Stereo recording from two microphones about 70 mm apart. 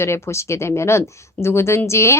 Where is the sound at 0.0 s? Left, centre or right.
Left.